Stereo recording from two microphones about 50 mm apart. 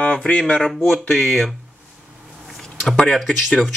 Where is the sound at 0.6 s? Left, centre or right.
Centre.